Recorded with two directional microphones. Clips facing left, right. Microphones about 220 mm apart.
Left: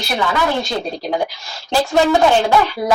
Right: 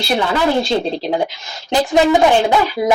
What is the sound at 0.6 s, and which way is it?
Speech, 25° right (ahead or behind).